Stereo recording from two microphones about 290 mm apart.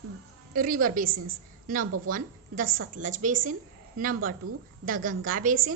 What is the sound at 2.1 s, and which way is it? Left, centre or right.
A woman's voice, right.